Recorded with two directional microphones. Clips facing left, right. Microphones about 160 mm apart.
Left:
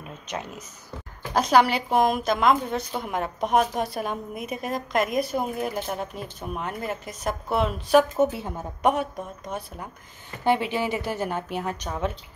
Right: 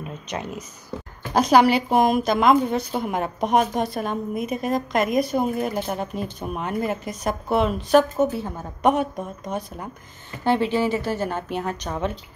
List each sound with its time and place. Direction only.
0.3 s a woman's voice: centre (ahead or behind)
8.2 s speech: 25° left (ahead or behind)
9.5 s a woman's voice: 5° left (ahead or behind)
10.4 s speech: 15° left (ahead or behind)